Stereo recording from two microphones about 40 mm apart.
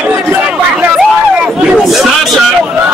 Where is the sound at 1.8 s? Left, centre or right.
Centre.